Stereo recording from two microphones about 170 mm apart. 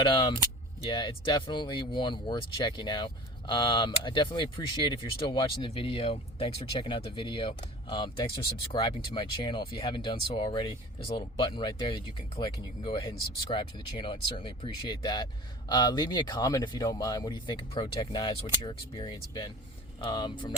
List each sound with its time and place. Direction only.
0.0 s speech: 25° left (ahead or behind)